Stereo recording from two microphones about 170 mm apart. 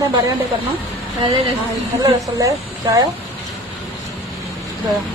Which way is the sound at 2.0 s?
20° right (ahead or behind).